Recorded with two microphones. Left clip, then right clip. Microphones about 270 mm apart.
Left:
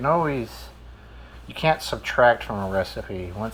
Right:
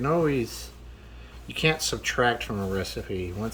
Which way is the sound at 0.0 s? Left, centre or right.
Centre.